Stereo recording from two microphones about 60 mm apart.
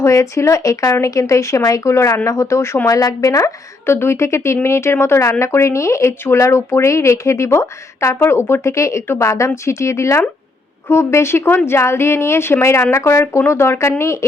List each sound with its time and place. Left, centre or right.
0.0 s speech: left
2.8 s speech: left
3.8 s speech: left